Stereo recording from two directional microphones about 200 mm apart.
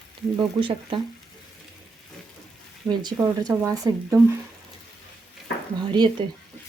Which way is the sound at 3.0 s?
20° right (ahead or behind).